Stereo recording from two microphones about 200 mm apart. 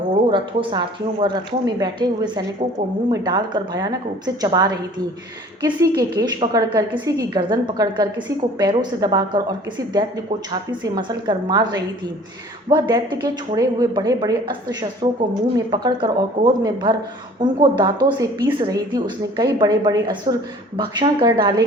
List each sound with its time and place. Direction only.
0.3 s a woman's voice: 25° right (ahead or behind)